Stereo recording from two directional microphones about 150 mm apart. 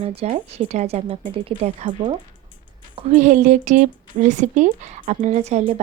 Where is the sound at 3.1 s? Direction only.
55° right (ahead or behind).